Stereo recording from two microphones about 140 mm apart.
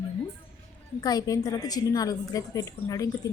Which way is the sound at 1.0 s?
25° left (ahead or behind).